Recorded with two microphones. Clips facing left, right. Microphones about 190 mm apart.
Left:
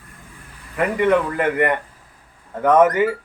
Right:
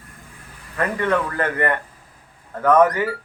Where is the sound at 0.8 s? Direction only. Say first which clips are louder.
Left 4 dB; 15° left (ahead or behind).